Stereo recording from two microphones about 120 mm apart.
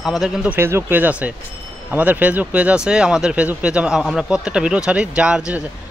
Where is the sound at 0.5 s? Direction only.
20° right (ahead or behind).